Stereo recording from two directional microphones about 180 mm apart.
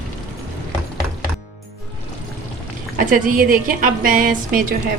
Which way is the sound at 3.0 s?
50° right (ahead or behind).